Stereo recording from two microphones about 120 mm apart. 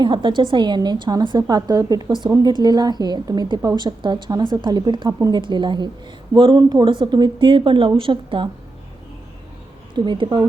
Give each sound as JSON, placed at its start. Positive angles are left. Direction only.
{"t": 0.0, "sound": "a woman's voice", "side_deg": -40}
{"t": 9.9, "sound": "a woman's voice", "side_deg": -40}